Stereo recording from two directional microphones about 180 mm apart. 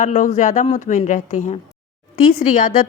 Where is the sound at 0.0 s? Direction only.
45° left (ahead or behind).